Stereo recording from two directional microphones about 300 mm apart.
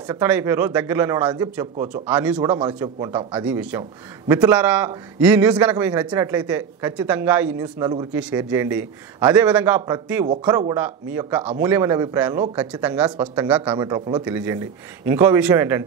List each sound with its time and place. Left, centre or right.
0.1 s a man's voice: centre